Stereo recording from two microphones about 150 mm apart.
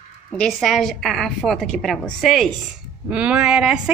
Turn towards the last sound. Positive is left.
turn(degrees=-5)  # may be behind; listen again after turning